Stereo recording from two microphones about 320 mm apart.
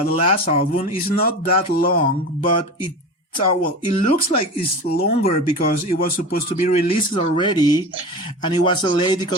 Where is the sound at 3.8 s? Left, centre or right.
Centre.